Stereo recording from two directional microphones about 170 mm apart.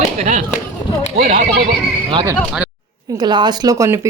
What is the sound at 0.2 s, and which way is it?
Speech, 50° right (ahead or behind).